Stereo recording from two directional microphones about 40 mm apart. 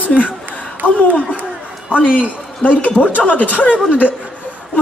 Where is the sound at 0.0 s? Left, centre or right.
Left.